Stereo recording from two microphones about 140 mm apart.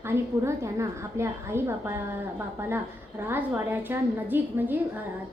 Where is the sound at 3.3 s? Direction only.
15° right (ahead or behind).